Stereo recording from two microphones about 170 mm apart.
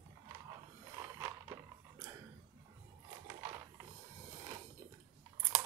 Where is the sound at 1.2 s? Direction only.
20° right (ahead or behind).